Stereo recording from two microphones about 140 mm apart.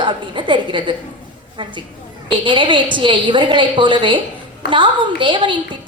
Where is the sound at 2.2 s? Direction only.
35° right (ahead or behind).